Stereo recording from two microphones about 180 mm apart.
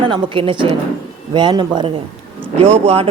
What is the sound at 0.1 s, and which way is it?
Speech, 25° right (ahead or behind).